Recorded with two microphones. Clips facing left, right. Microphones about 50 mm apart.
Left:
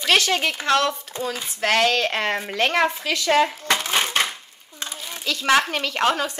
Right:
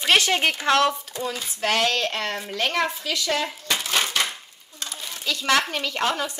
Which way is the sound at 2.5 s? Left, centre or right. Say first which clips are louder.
Left 3 dB; left.